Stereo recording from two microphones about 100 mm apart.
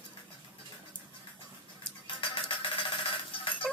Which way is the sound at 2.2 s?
60° left (ahead or behind).